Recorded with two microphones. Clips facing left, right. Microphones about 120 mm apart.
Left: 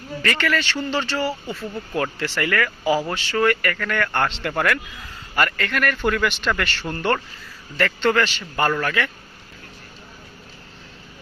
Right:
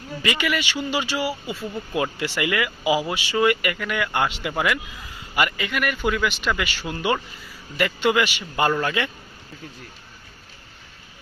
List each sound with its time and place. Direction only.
0.2 s speech: 15° right (ahead or behind)